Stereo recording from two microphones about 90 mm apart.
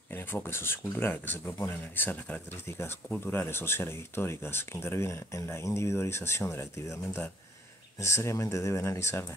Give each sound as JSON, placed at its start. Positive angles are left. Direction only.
{"t": 0.1, "sound": "speech", "side_deg": 25}